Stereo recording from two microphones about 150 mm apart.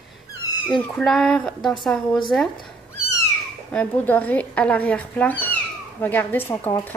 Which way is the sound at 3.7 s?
10° left (ahead or behind).